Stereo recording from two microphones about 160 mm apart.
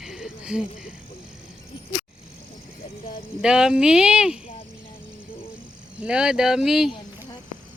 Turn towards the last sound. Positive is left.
turn(degrees=-5)  # may be behind; listen again after turning